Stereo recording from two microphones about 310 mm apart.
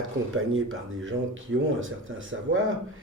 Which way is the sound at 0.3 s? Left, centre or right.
Right.